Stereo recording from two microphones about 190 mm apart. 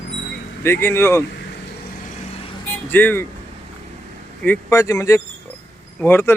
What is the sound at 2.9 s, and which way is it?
Speech, 10° left (ahead or behind).